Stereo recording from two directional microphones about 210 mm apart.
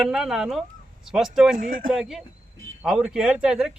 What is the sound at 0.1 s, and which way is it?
Speech, centre (ahead or behind).